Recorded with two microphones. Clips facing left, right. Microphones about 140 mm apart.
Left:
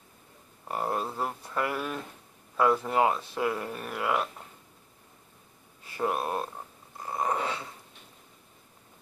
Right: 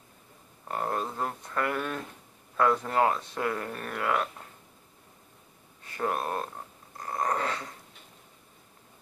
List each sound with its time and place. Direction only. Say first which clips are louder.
0.7 s speech: even; 10° left (ahead or behind)
5.9 s speech: left 1 dB; 10° left (ahead or behind)
7.0 s a sound: even; 5° left (ahead or behind)